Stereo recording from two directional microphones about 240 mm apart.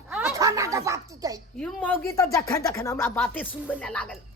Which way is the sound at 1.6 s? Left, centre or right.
Centre.